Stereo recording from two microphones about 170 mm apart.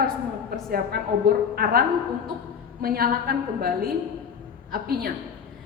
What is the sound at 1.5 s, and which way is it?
Speech, 60° right (ahead or behind).